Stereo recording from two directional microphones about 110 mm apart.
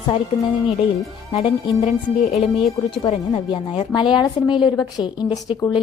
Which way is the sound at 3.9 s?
40° left (ahead or behind).